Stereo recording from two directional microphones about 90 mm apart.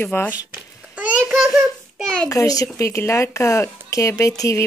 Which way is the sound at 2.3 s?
40° left (ahead or behind).